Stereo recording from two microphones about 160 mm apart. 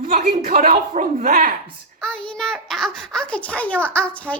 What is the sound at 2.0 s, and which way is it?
A child's voice, 5° left (ahead or behind).